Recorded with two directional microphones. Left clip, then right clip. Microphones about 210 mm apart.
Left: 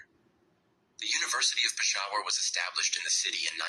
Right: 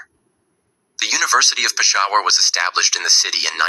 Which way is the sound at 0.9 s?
40° right (ahead or behind).